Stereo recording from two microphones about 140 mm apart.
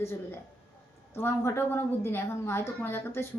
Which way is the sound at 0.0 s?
20° left (ahead or behind).